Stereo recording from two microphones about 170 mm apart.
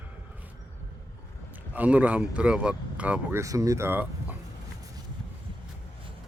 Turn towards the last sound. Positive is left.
turn(degrees=-10)  # may be behind; listen again after turning